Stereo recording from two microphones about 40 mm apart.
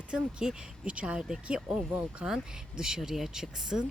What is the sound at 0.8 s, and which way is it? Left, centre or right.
Speech, right.